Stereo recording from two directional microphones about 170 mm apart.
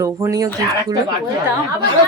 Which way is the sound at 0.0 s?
20° right (ahead or behind).